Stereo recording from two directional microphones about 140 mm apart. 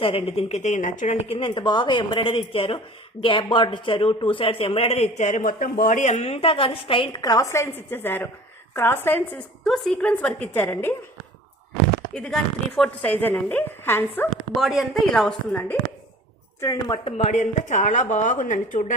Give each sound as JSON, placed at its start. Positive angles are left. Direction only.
{"t": 0.0, "sound": "a woman's voice", "side_deg": 40}
{"t": 9.6, "sound": "a woman's voice", "side_deg": 0}
{"t": 12.1, "sound": "a woman's voice", "side_deg": 5}
{"t": 14.3, "sound": "speech", "side_deg": 0}
{"t": 16.6, "sound": "speech", "side_deg": 30}